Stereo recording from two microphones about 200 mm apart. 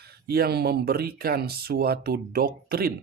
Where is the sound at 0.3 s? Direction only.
50° right (ahead or behind).